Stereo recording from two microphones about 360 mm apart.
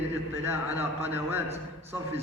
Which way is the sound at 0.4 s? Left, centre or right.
Centre.